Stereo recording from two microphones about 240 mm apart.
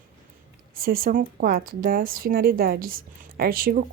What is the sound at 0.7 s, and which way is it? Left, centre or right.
Speech, right.